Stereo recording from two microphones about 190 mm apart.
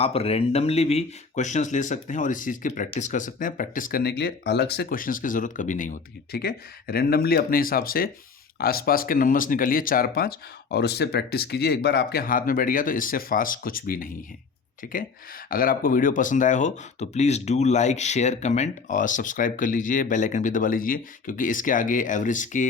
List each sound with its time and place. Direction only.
0.0 s speech: 30° left (ahead or behind); by 14.1 s 50° left (ahead or behind)
15.4 s speech: 50° left (ahead or behind)